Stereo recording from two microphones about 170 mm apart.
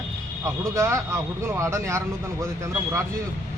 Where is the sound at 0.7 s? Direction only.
15° right (ahead or behind).